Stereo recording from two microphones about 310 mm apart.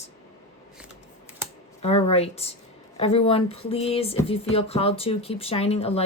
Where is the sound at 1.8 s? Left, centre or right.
Centre.